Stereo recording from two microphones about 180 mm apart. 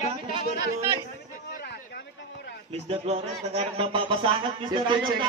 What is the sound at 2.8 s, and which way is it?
A man's voice, 35° right (ahead or behind).